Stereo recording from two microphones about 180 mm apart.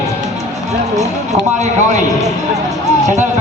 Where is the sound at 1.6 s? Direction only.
40° right (ahead or behind).